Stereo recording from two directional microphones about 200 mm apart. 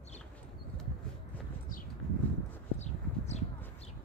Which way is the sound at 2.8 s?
35° left (ahead or behind).